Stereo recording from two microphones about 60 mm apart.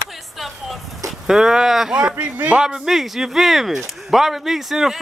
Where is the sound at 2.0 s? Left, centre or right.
Centre.